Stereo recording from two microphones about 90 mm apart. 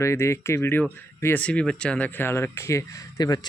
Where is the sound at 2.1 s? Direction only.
25° left (ahead or behind); by 3.4 s 45° left (ahead or behind).